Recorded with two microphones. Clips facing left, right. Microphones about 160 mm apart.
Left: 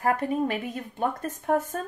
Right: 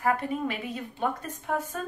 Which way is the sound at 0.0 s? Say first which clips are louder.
Left 2 dB; 45° left (ahead or behind).